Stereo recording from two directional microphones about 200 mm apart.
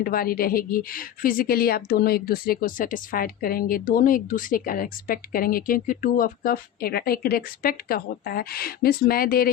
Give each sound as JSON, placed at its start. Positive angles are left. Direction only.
{"t": 0.0, "sound": "a woman's voice", "side_deg": 45}